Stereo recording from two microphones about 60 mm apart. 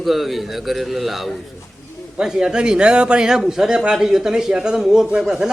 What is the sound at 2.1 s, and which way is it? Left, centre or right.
Speech, centre.